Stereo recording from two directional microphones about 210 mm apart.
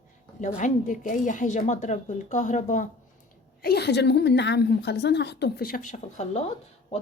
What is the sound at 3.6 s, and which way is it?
A woman's voice, 50° left (ahead or behind).